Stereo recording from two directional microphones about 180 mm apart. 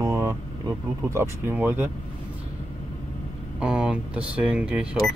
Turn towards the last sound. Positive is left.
turn(degrees=-5)  # may be behind; listen again after turning